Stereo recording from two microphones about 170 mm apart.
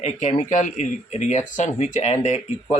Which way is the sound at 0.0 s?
40° left (ahead or behind).